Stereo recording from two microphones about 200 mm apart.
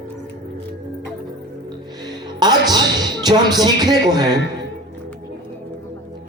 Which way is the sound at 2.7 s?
20° right (ahead or behind).